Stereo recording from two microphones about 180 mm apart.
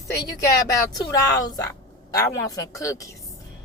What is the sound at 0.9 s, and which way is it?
Speech, 20° left (ahead or behind).